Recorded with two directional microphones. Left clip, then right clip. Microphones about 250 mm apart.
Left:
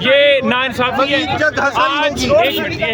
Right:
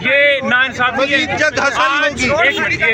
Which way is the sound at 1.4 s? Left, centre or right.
Centre.